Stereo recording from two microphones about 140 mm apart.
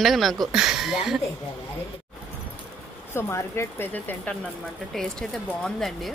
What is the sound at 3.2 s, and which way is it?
Speech, 20° left (ahead or behind).